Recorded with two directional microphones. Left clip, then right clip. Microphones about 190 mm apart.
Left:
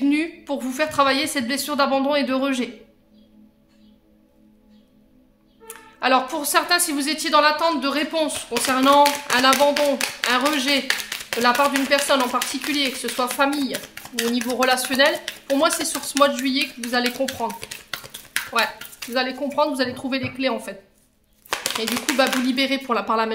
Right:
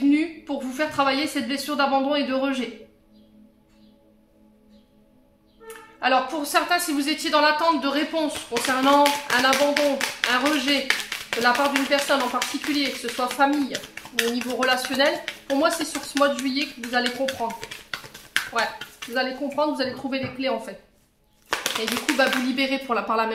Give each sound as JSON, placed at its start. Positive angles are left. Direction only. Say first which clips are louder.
{"t": 0.1, "sound": "a woman's voice", "louder": "even", "side_deg": 40}
{"t": 5.7, "sound": "a woman's voice", "louder": "left 2 dB", "side_deg": 35}